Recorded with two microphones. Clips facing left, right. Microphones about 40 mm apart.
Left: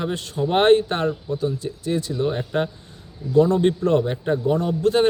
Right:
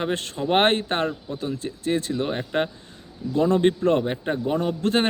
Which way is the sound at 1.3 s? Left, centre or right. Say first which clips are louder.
Left 5 dB; right.